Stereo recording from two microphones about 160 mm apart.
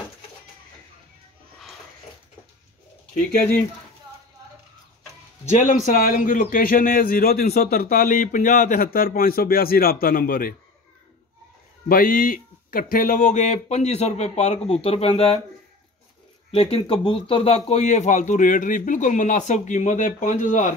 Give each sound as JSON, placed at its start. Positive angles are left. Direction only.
{"t": 5.5, "sound": "speech", "side_deg": 55}
{"t": 11.9, "sound": "speech", "side_deg": 60}
{"t": 16.5, "sound": "speech", "side_deg": 35}